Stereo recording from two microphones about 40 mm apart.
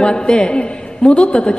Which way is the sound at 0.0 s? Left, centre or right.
Centre.